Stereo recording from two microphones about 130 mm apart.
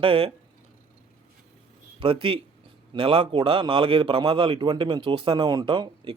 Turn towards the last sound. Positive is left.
turn(degrees=-35)  # may be behind; listen again after turning